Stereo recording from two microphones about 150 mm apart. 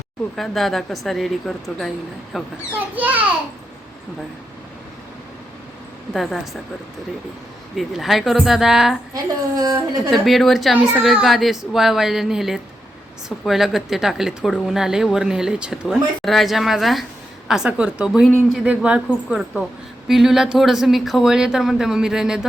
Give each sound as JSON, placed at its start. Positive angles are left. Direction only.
{"t": 0.3, "sound": "a woman's voice", "side_deg": 0}
{"t": 6.1, "sound": "a woman's voice", "side_deg": 0}
{"t": 7.8, "sound": "a woman's voice", "side_deg": 0}
{"t": 9.1, "sound": "a woman's voice", "side_deg": -25}
{"t": 10.1, "sound": "a woman's voice", "side_deg": 0}